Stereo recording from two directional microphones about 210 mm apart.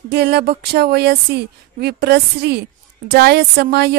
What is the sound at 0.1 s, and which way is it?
Speech, 50° right (ahead or behind).